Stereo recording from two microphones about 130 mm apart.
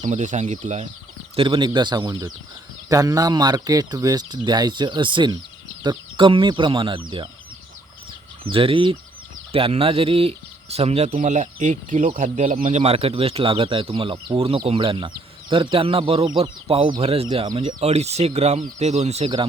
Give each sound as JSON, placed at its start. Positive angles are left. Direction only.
{"t": 0.0, "sound": "speech", "side_deg": -70}
{"t": 1.4, "sound": "speech", "side_deg": -40}
{"t": 8.5, "sound": "speech", "side_deg": -45}
{"t": 17.3, "sound": "speech", "side_deg": -35}
{"t": 17.7, "sound": "speech", "side_deg": -55}